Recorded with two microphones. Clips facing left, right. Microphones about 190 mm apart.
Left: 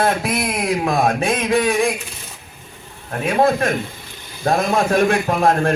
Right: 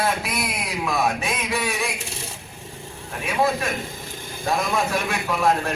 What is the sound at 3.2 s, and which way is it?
A man's voice, 50° left (ahead or behind).